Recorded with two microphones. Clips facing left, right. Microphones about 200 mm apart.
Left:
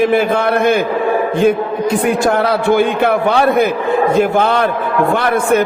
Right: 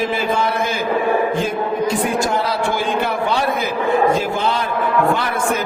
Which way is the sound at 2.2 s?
60° left (ahead or behind).